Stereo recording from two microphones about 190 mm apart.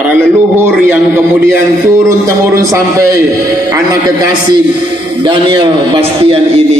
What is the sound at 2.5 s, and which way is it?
A man's voice, 15° right (ahead or behind).